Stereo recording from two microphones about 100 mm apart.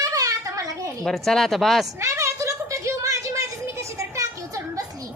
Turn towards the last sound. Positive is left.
turn(degrees=-30)  # may be behind; listen again after turning